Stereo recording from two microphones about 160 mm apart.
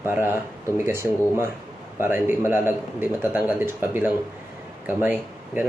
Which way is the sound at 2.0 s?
15° right (ahead or behind).